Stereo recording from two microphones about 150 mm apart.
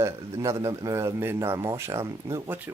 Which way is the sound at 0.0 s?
20° right (ahead or behind).